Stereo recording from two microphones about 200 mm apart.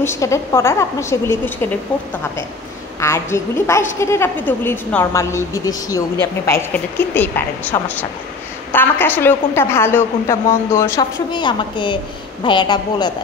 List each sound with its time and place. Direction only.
0.0 s a woman's voice: 15° left (ahead or behind)
3.0 s a woman's voice: 15° left (ahead or behind)
10.8 s a woman's voice: 20° left (ahead or behind)